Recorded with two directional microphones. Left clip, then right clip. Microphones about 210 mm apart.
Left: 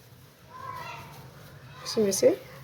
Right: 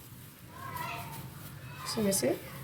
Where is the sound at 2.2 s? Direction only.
45° left (ahead or behind).